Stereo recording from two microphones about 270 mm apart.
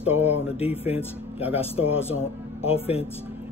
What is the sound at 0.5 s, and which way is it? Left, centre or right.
Speech, left.